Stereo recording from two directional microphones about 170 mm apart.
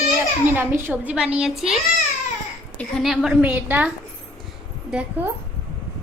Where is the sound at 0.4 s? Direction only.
10° right (ahead or behind).